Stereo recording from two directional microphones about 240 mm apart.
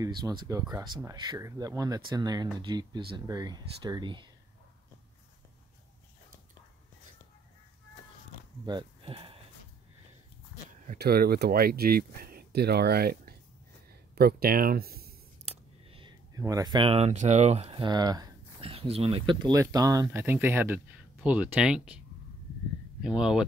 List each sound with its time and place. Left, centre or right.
0.0 s speech: centre
8.6 s speech: centre
10.9 s speech: right
15.4 s speech: right; by 22.0 s centre
23.0 s speech: centre